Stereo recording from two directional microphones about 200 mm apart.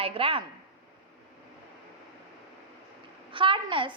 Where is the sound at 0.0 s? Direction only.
30° right (ahead or behind).